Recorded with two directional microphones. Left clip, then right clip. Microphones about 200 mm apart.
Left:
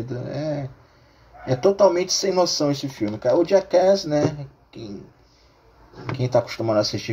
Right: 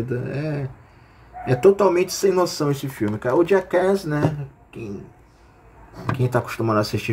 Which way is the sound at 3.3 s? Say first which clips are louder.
Left 1 dB; centre (ahead or behind).